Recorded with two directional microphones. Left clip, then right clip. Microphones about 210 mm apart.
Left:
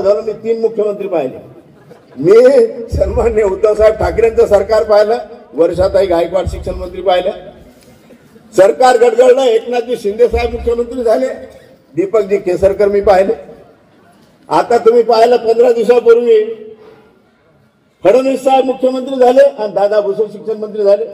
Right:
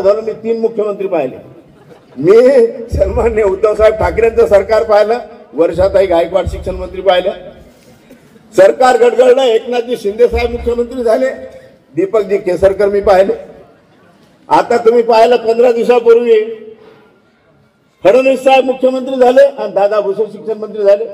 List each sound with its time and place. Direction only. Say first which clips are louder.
0.0 s a man's voice: right 1 dB; 30° right (ahead or behind)
2.2 s a man's voice: even; 30° right (ahead or behind)
8.5 s a man's voice: right 1 dB; 30° right (ahead or behind)
14.5 s a man's voice: even; 30° right (ahead or behind)
18.0 s a man's voice: right 2 dB; 30° right (ahead or behind)